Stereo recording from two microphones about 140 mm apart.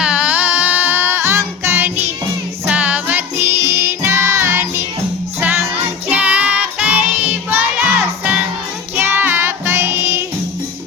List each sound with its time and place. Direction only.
0.0 s music: 5° right (ahead or behind)